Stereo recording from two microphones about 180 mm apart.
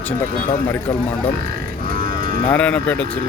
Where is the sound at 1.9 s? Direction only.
55° right (ahead or behind).